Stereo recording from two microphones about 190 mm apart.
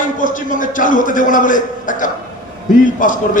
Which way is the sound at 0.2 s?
45° left (ahead or behind).